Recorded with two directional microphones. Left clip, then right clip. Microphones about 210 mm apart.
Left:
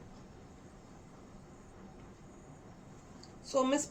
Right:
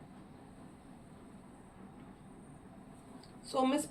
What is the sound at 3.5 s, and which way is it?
Speech, 20° left (ahead or behind).